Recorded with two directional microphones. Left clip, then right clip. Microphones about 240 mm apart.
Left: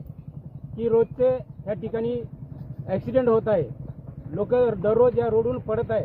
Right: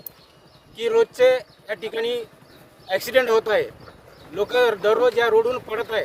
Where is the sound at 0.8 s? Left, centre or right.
Right.